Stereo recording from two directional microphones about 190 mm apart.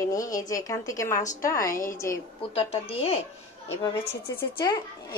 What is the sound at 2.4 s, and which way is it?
Speech, 30° left (ahead or behind).